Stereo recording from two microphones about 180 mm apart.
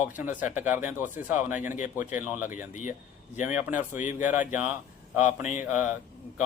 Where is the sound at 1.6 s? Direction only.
45° left (ahead or behind).